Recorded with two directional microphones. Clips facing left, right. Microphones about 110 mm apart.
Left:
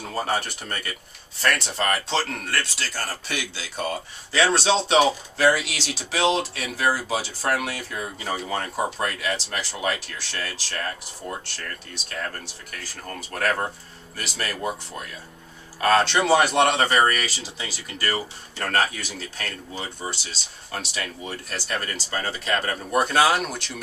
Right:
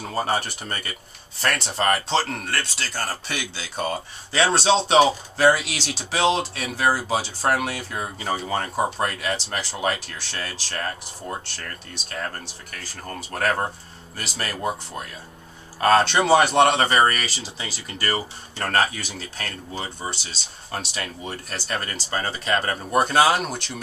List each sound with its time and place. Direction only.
0.0 s speech: 25° right (ahead or behind)
13.0 s speech: 25° right (ahead or behind)